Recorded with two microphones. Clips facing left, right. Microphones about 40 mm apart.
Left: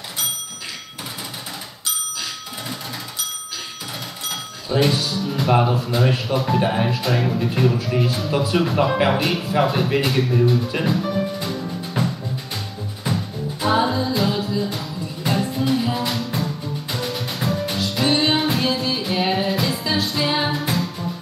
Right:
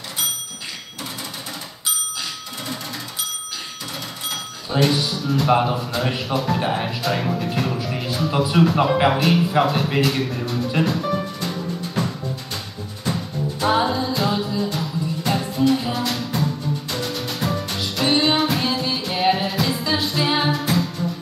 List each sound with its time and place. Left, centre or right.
4.8 s speech: centre
11.0 s music: centre
12.0 s music: centre
13.1 s music: centre
15.9 s music: centre